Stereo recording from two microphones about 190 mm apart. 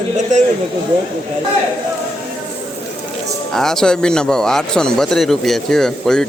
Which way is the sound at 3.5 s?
Centre (ahead or behind).